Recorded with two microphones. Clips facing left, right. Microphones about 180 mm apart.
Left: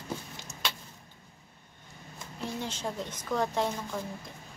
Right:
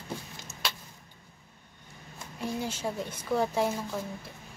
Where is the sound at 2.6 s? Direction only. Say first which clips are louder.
Right 2 dB; 10° right (ahead or behind).